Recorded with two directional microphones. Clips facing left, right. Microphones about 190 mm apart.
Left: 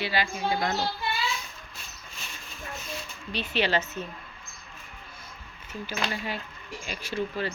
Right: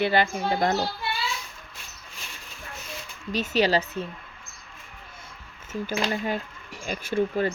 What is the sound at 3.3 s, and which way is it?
Speech, 40° right (ahead or behind).